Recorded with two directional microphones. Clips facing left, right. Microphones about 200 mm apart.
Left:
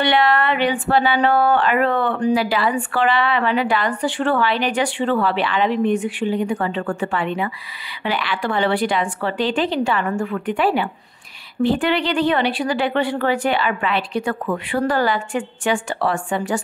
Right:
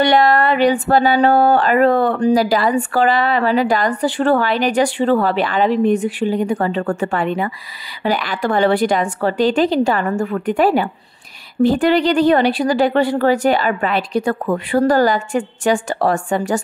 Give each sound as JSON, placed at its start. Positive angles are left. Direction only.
{"t": 0.0, "sound": "a woman's voice", "side_deg": -40}